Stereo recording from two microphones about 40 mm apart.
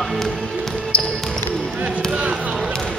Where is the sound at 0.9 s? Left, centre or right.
Left.